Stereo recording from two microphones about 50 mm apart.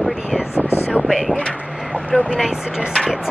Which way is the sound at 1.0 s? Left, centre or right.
Centre.